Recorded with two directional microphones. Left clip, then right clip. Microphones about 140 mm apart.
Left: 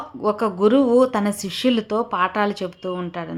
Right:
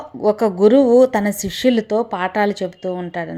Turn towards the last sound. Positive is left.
turn(degrees=-15)  # may be behind; listen again after turning